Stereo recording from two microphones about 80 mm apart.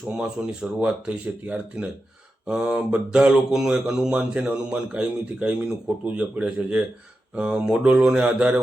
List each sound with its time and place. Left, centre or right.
0.1 s speech: centre